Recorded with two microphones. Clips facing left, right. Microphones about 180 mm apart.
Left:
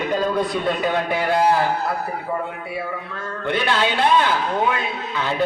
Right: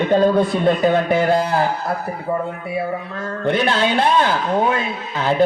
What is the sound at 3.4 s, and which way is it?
Speech, 50° right (ahead or behind).